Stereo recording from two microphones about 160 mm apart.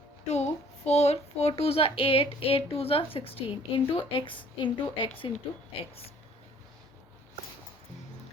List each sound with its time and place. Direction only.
0.3 s speech: 45° left (ahead or behind)